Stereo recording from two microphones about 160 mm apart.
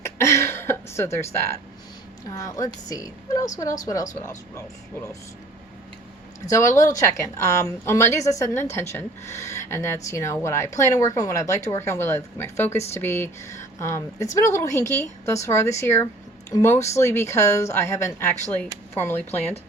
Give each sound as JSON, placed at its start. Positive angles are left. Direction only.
{"t": 0.0, "sound": "throat clearing", "side_deg": 15}
{"t": 2.9, "sound": "speech", "side_deg": 20}
{"t": 6.5, "sound": "speech", "side_deg": 20}